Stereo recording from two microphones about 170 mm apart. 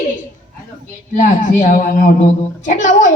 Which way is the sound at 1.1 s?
50° left (ahead or behind).